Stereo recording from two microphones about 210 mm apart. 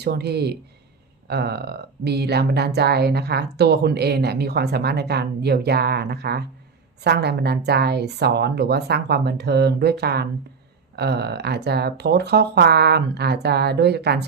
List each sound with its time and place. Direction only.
0.0 s speech: 50° right (ahead or behind)